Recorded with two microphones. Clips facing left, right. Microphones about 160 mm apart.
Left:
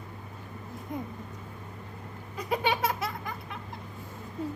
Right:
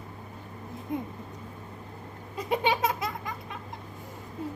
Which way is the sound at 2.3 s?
25° right (ahead or behind).